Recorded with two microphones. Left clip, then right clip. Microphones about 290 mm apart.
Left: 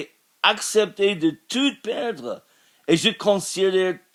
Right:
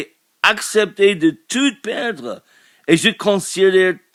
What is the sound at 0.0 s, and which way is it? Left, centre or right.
Speech, right.